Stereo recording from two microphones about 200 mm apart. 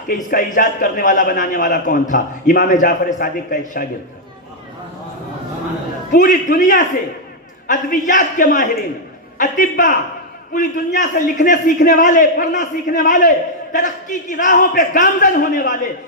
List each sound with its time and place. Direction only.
0.3 s a man's voice: 45° left (ahead or behind)
6.1 s a man's voice: 40° left (ahead or behind)